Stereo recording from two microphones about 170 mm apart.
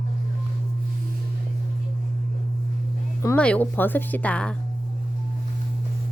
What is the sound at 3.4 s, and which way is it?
Speech, 10° left (ahead or behind).